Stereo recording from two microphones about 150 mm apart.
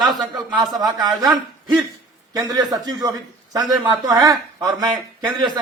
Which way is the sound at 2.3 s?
25° right (ahead or behind).